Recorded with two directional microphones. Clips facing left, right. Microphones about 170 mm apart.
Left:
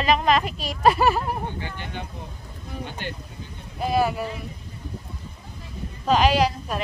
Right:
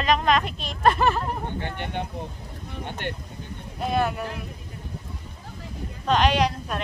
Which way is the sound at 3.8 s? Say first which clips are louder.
Left 2 dB; 5° left (ahead or behind).